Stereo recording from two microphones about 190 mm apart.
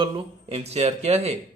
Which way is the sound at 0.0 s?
30° right (ahead or behind).